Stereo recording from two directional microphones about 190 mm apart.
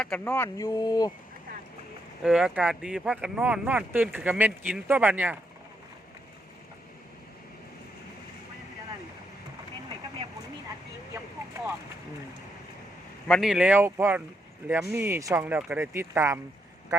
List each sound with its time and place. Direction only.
0.0 s speech: 5° left (ahead or behind)
2.2 s speech: 5° right (ahead or behind)
11.1 s vehicle: 15° right (ahead or behind)
13.2 s speech: centre (ahead or behind)
16.9 s quack: 20° right (ahead or behind)